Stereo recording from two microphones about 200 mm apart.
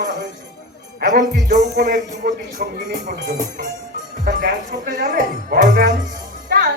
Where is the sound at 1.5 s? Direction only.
55° right (ahead or behind).